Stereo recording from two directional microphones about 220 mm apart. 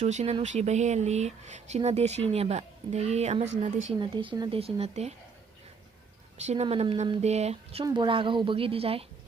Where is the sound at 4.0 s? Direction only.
20° right (ahead or behind).